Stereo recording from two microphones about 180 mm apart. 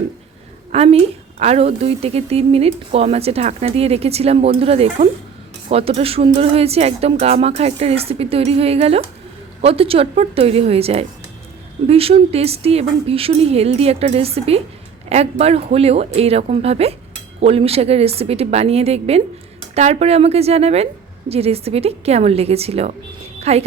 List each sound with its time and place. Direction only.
0.7 s a woman's voice: 35° right (ahead or behind)